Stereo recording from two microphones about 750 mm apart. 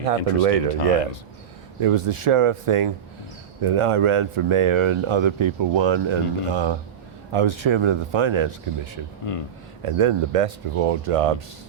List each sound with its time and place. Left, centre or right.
0.2 s speech: left
0.4 s speech: right
9.3 s speech: left
9.8 s speech: right